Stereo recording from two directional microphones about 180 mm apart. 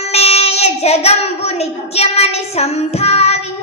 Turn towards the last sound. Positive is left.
turn(degrees=35)  # may be behind; listen again after turning